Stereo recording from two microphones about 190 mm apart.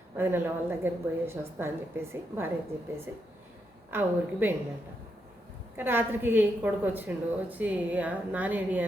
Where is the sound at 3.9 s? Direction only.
10° right (ahead or behind).